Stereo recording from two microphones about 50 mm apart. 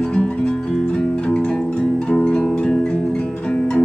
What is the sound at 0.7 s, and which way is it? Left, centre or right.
Music, centre.